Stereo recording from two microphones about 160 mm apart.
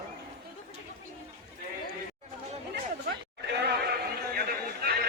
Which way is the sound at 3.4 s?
90° right.